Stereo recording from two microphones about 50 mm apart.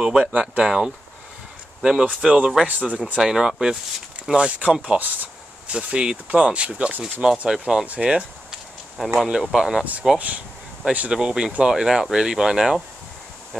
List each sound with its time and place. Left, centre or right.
0.0 s speech: centre
1.8 s speech: centre
3.2 s speech: centre
4.4 s speech: right
7.8 s speech: right
8.1 s speech: centre
10.1 s speech: right
11.1 s speech: centre